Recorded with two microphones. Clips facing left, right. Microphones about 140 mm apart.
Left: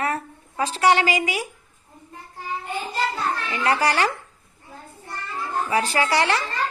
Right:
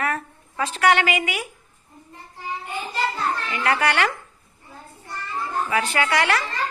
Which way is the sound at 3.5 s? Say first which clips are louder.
Left 1 dB; 30° left (ahead or behind).